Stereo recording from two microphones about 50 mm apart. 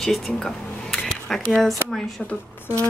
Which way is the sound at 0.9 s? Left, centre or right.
Centre.